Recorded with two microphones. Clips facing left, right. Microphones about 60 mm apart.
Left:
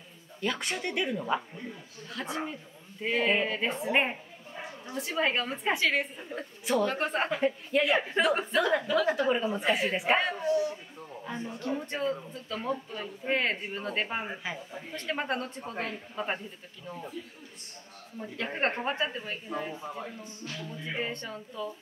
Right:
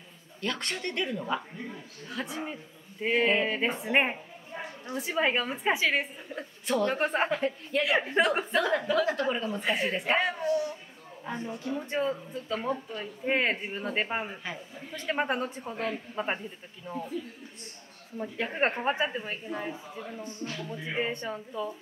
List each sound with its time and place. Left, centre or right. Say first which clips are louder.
0.4 s speech: left 1 dB; centre
2.2 s a woman's voice: left 1 dB; centre
6.2 s speech: left 1 dB; centre
6.9 s a woman's voice: right 2 dB; centre
7.2 s speech: left 1 dB; centre
10.4 s speech: left 1 dB; left
11.3 s speech: right 2 dB; right
11.8 s a woman's voice: right 2 dB; centre
14.2 s speech: left 1 dB; centre
15.0 s a woman's voice: right 3 dB; centre
16.9 s speech: right 5 dB; right
18.1 s a woman's voice: right 2 dB; centre